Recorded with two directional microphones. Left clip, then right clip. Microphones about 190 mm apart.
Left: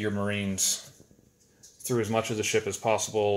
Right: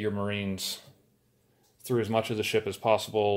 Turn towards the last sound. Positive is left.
turn(degrees=-15)  # may be behind; listen again after turning